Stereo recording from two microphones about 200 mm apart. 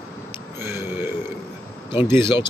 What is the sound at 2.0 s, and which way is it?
Speech, 15° right (ahead or behind).